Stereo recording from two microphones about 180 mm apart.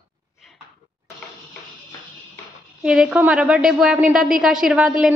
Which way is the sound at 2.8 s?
5° right (ahead or behind).